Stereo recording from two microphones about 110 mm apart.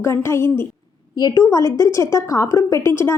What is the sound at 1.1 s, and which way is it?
A woman's voice, 35° left (ahead or behind).